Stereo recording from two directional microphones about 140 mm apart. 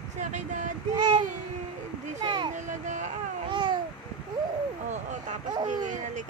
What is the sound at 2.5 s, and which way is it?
Speech, 60° right (ahead or behind).